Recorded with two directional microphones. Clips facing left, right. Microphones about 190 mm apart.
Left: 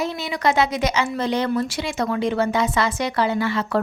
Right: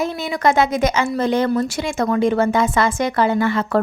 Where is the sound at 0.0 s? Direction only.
50° right (ahead or behind).